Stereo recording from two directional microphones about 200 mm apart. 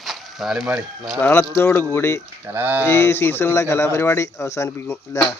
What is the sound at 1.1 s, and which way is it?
Speech, 10° left (ahead or behind).